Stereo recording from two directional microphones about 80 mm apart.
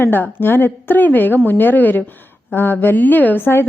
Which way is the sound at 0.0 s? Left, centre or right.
Left.